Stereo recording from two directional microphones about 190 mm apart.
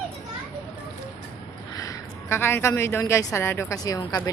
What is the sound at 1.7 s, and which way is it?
A woman's voice, 15° left (ahead or behind).